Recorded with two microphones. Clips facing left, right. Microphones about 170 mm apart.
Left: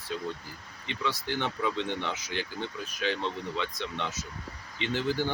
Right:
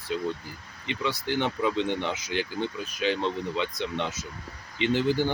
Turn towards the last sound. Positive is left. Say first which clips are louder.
# right 5 dB
turn(degrees=-15)  # may be behind; listen again after turning